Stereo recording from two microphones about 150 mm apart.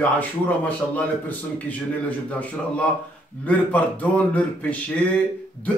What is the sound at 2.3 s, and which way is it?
A man's voice, 10° left (ahead or behind).